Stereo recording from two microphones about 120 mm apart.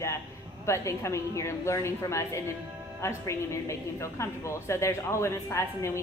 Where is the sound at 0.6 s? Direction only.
25° left (ahead or behind).